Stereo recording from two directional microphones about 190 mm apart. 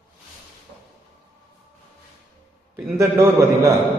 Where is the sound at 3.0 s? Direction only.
15° right (ahead or behind).